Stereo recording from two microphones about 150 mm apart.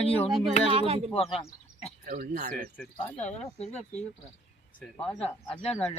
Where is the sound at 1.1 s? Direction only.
40° left (ahead or behind).